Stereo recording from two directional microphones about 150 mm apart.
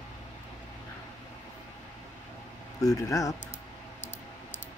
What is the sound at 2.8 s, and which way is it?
Speech, 25° left (ahead or behind).